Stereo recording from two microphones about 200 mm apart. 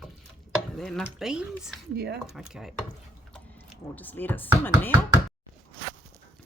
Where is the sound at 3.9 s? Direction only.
10° left (ahead or behind).